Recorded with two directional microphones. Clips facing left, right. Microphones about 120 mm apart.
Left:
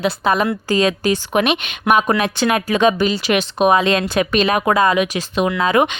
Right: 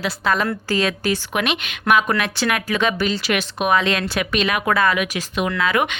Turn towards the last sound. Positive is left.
turn(degrees=25)  # may be behind; listen again after turning